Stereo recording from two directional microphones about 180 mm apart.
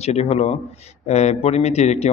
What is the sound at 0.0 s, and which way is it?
Speech, 35° left (ahead or behind).